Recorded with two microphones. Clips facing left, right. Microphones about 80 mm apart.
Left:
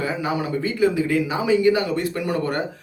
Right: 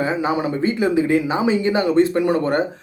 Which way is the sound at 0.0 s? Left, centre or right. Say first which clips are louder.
Right 4 dB; right.